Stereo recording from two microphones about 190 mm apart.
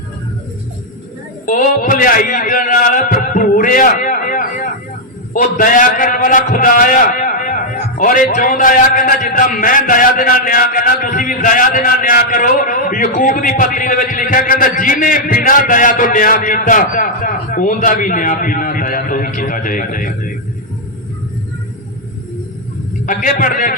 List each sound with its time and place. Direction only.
1.5 s a man's voice: 45° left (ahead or behind)
23.0 s a man's voice: 45° left (ahead or behind)